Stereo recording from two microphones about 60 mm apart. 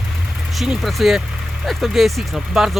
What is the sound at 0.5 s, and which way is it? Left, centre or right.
Speech, centre.